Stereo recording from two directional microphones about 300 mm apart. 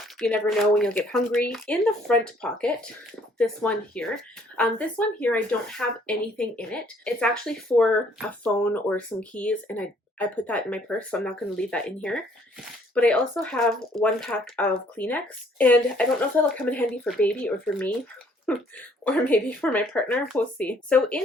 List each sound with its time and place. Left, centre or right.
0.0 s speech: centre